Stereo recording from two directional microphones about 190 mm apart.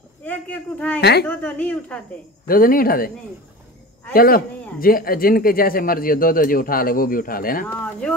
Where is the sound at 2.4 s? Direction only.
50° left (ahead or behind).